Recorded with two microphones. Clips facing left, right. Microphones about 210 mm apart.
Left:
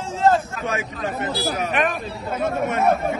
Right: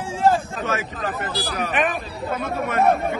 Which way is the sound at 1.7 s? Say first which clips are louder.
Even; centre (ahead or behind).